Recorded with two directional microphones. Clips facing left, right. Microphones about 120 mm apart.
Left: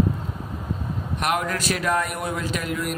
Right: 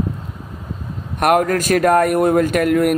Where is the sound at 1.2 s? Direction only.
50° right (ahead or behind).